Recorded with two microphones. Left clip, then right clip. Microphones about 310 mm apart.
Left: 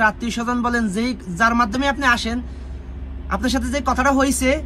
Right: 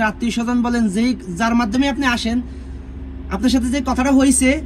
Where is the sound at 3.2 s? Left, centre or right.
Left.